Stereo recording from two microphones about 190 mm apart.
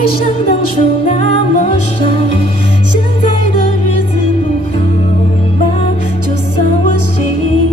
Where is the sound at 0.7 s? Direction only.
40° left (ahead or behind).